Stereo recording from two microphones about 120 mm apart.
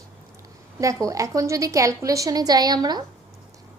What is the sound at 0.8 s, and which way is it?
A woman's voice, 25° right (ahead or behind).